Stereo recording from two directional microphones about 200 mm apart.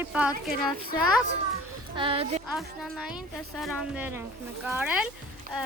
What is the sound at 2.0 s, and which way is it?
Speech, 25° right (ahead or behind).